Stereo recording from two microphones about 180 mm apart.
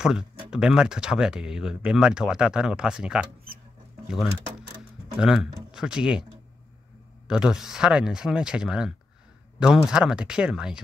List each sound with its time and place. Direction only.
0.0 s speech: 5° right (ahead or behind)
5.2 s speech: 5° right (ahead or behind)
7.2 s speech: 5° right (ahead or behind)